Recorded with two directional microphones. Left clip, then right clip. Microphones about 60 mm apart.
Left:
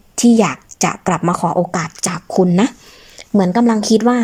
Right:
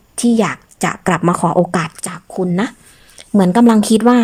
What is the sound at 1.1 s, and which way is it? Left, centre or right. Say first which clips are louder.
Speech: right 4 dB; centre.